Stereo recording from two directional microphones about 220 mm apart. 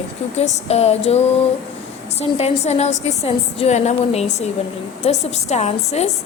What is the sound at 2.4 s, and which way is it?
A woman's voice, 30° left (ahead or behind).